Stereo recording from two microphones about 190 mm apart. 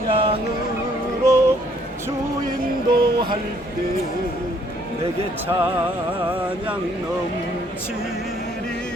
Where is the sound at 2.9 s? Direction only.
25° right (ahead or behind).